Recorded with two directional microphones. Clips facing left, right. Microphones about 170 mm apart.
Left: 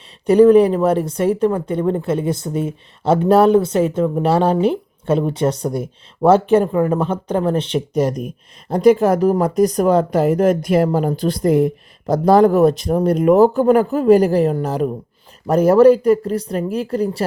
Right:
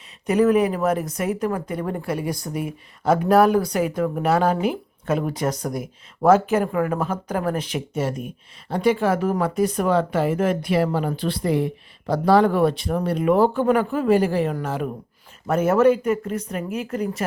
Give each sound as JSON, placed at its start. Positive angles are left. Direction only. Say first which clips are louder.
{"t": 0.3, "sound": "speech", "louder": "left 8 dB", "side_deg": 30}